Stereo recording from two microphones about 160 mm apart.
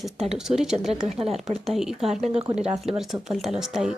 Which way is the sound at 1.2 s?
40° right (ahead or behind).